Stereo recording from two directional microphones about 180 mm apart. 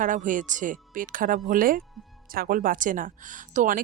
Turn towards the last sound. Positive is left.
turn(degrees=-45)  # may be behind; listen again after turning